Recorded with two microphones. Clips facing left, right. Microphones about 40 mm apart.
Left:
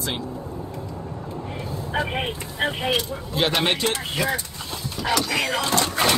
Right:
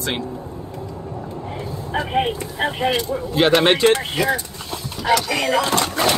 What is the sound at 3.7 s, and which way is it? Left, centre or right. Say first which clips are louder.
Speech: right 9 dB; right.